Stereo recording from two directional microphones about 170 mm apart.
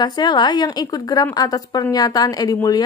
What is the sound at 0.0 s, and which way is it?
A woman's voice, 25° left (ahead or behind).